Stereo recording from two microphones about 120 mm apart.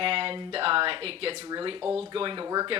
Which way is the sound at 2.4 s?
30° right (ahead or behind).